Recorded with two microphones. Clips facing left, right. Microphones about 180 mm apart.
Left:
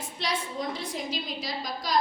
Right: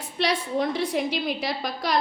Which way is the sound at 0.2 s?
65° right (ahead or behind).